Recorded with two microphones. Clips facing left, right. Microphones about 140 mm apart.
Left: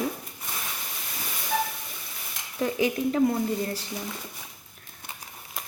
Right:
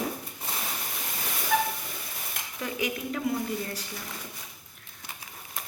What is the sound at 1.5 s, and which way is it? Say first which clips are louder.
Train: right 1 dB; 90° right.